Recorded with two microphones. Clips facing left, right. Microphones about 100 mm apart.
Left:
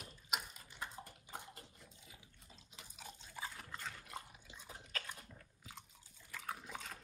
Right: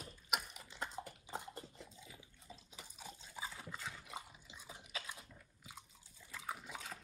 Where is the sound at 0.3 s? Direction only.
70° right (ahead or behind).